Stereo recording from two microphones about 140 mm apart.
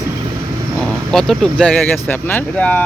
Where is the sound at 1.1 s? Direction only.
5° left (ahead or behind).